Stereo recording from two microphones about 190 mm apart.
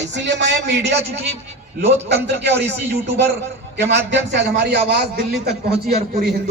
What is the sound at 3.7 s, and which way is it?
A man's voice, 65° right (ahead or behind).